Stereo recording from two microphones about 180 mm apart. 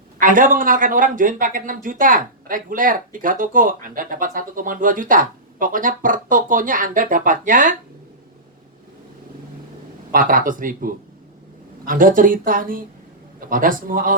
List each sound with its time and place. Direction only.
0.2 s speech: 50° right (ahead or behind)
10.1 s speech: 50° right (ahead or behind)